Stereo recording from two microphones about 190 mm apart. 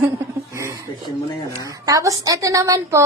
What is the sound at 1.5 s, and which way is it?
A woman's voice, 20° right (ahead or behind).